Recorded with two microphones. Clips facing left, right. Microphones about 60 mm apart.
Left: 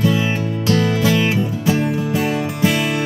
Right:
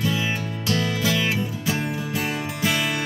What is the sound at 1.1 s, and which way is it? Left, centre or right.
Music, left.